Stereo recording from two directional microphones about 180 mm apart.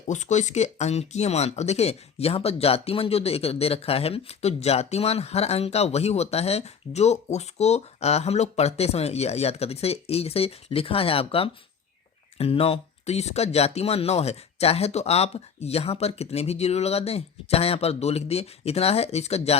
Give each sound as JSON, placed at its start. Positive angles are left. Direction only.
{"t": 0.1, "sound": "speech", "side_deg": 40}